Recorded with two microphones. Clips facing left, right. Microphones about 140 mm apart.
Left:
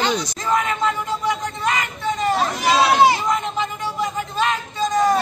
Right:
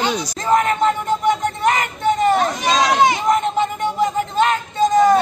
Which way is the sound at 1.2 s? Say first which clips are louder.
Right 6 dB; 50° right (ahead or behind).